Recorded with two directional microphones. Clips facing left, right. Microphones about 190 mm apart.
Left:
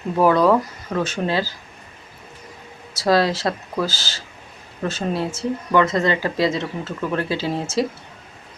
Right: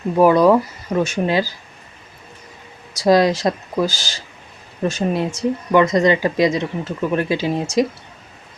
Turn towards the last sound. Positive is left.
turn(degrees=-15)  # may be behind; listen again after turning